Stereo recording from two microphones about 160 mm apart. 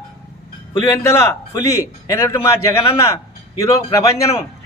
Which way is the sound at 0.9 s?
15° left (ahead or behind).